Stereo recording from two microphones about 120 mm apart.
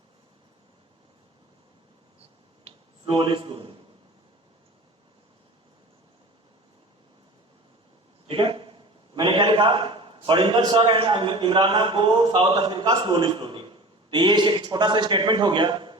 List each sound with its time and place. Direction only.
2.7 s a sound: 55° right (ahead or behind)
3.2 s a man's voice: 45° right (ahead or behind)
8.3 s a man's voice: 45° right (ahead or behind)